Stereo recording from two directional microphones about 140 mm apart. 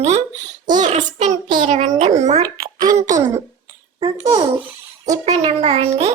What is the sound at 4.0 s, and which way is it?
Speech, 35° right (ahead or behind).